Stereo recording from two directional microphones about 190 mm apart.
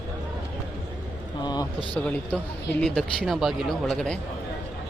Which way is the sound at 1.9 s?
5° left (ahead or behind).